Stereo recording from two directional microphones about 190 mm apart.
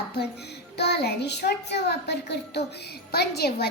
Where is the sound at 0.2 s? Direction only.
60° left (ahead or behind).